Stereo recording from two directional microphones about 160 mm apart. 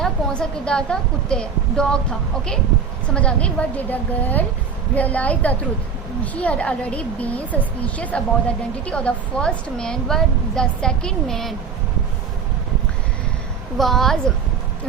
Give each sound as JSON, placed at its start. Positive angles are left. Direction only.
{"t": 0.0, "sound": "a woman's voice", "side_deg": 5}
{"t": 13.7, "sound": "a woman's voice", "side_deg": 0}